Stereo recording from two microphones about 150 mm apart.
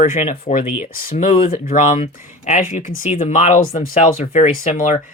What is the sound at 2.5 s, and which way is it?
Speech, 55° left (ahead or behind).